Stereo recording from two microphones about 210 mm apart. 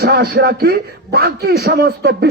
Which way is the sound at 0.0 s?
50° right (ahead or behind).